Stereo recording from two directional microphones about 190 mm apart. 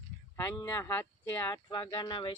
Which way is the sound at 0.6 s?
10° left (ahead or behind).